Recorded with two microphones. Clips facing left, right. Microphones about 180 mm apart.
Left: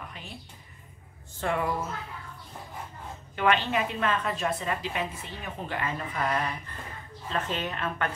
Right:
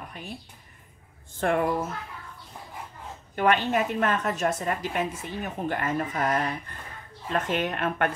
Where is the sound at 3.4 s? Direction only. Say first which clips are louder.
Right 2 dB; 45° right (ahead or behind).